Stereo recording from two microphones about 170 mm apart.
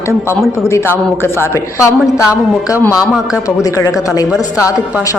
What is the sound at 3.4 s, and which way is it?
Speech, 20° left (ahead or behind).